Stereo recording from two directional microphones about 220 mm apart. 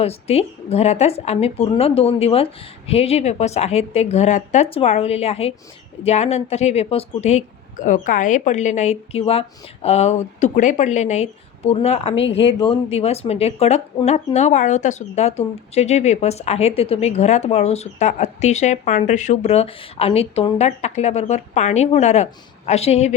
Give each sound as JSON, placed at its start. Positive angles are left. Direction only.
{"t": 0.0, "sound": "speech", "side_deg": 25}